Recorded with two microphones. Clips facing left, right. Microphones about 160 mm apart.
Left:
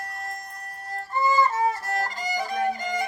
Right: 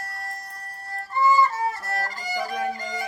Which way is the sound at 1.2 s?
20° left (ahead or behind).